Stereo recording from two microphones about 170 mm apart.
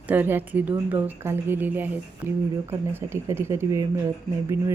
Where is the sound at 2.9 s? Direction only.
15° right (ahead or behind).